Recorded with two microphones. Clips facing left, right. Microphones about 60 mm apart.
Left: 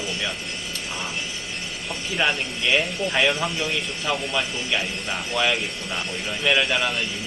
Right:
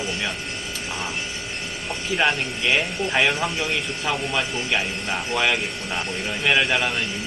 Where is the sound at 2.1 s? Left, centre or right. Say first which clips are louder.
Right 2 dB; centre.